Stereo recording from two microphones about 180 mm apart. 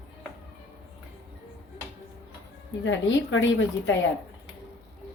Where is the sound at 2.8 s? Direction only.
90° left.